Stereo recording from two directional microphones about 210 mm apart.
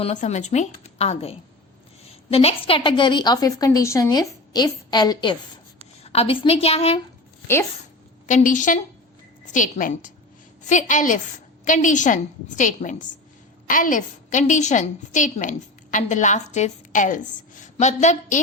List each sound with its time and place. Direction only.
0.0 s a woman's voice: 35° left (ahead or behind)
8.3 s a woman's voice: 35° left (ahead or behind)